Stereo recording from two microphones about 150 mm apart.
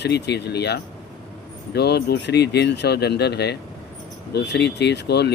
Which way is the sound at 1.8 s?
90° left.